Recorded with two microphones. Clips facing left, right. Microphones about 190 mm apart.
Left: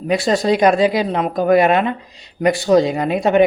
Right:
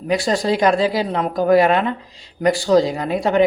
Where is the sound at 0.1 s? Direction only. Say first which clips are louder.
Left 2 dB; 25° left (ahead or behind).